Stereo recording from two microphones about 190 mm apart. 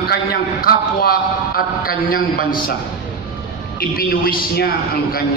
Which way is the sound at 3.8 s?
50° left (ahead or behind).